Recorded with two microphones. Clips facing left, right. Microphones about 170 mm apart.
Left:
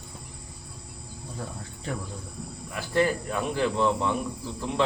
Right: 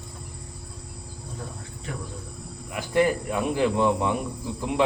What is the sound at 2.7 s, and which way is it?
Speech, 15° right (ahead or behind).